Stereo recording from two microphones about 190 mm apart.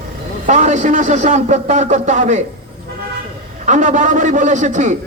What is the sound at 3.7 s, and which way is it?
A man's voice, 40° right (ahead or behind).